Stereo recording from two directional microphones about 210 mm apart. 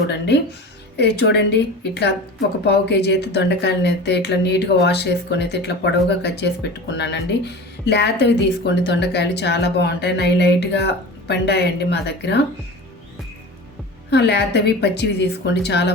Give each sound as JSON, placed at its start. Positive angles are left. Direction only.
{"t": 0.9, "sound": "speech", "side_deg": 50}
{"t": 14.1, "sound": "speech", "side_deg": 50}